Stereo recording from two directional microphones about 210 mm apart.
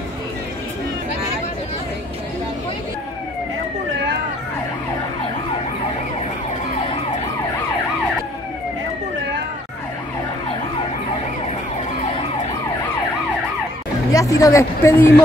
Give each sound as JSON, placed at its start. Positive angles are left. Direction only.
{"t": 14.1, "sound": "a woman's voice", "side_deg": 15}